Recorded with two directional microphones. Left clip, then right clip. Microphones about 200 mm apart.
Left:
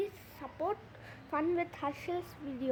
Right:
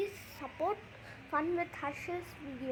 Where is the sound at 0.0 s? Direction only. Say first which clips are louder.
Even; 5° left (ahead or behind).